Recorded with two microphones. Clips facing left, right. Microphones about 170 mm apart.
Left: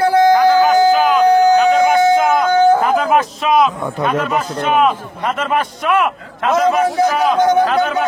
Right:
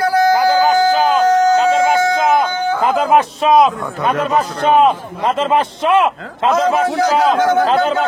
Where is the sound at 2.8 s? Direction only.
30° right (ahead or behind).